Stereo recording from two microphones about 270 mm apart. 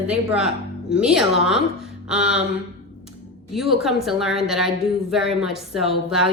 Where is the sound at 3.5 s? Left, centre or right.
Centre.